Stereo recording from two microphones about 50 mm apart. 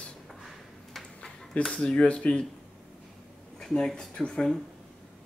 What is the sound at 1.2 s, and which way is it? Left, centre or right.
Speech, centre.